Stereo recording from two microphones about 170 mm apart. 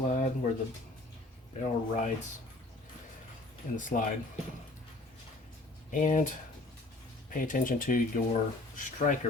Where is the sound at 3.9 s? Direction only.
60° left (ahead or behind).